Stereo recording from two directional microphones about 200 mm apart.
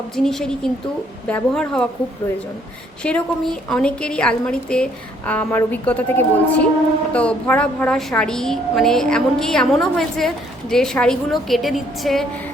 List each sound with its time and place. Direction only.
0.2 s a woman's voice: centre (ahead or behind)